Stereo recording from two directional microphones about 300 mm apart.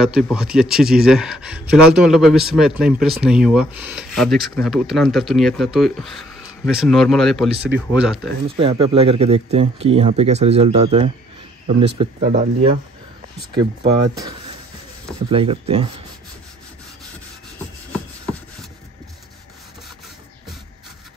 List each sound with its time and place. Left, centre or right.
0.0 s a man's voice: centre
8.5 s speech: centre
13.6 s speech: centre